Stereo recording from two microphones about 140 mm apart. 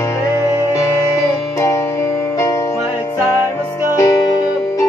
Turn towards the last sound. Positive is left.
turn(degrees=25)  # may be behind; listen again after turning